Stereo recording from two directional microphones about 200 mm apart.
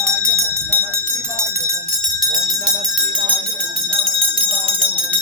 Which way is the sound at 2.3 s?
20° right (ahead or behind).